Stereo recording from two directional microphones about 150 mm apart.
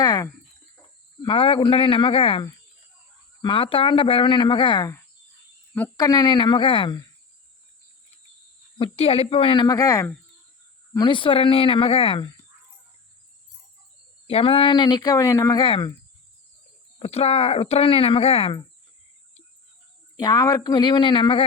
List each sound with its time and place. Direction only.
0.0 s a sound: 25° left (ahead or behind)
1.2 s speech: 35° left (ahead or behind)
3.4 s speech: 35° left (ahead or behind)
6.0 s speech: 25° left (ahead or behind)
8.8 s speech: 40° left (ahead or behind); by 10.2 s 25° left (ahead or behind)
10.9 s speech: 35° left (ahead or behind)
14.3 s speech: 40° left (ahead or behind); by 15.6 s 20° left (ahead or behind)
15.6 s speech: 35° left (ahead or behind)
17.0 s speech: 45° left (ahead or behind)
20.1 s speech: 25° left (ahead or behind)